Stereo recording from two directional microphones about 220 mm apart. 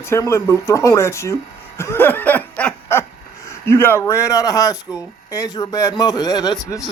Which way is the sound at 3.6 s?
10° left (ahead or behind).